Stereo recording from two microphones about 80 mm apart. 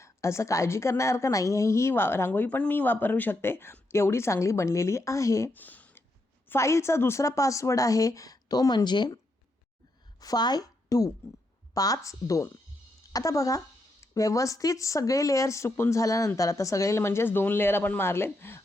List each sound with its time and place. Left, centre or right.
0.0 s a woman's voice: left
5.5 s a sound: left
6.5 s speech: left
10.2 s a woman's voice: left